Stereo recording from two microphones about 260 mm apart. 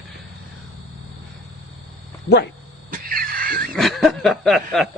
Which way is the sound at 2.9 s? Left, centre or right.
Right.